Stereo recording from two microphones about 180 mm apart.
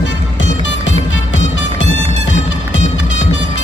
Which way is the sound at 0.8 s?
90° left.